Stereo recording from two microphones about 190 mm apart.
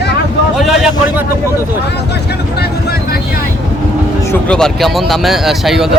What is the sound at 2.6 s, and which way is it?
Vehicle, 55° left (ahead or behind).